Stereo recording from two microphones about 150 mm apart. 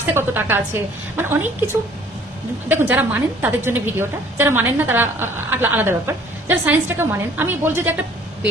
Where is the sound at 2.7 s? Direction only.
15° right (ahead or behind).